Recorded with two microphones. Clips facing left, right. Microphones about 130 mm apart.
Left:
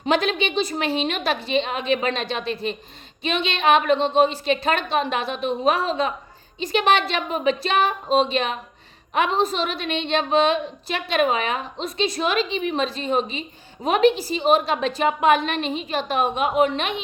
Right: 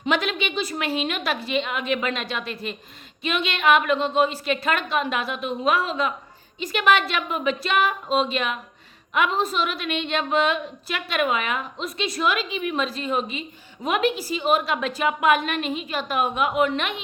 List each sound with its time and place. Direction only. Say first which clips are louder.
0.0 s a woman's voice: left 3 dB; 30° left (ahead or behind)